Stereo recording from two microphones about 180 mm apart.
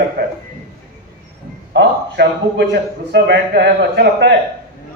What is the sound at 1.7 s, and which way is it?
A man's voice, 70° right (ahead or behind).